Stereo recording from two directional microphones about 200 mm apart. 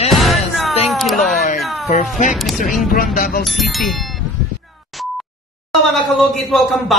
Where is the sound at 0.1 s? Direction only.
Centre (ahead or behind).